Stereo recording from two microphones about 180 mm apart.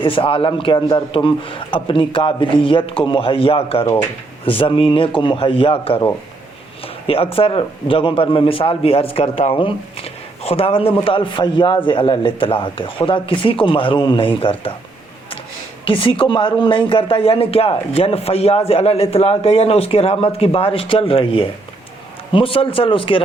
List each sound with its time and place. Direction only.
0.0 s speech: 30° left (ahead or behind)
15.8 s speech: 30° left (ahead or behind)